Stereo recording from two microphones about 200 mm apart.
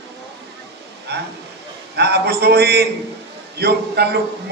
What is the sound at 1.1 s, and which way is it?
A man's voice, 55° right (ahead or behind).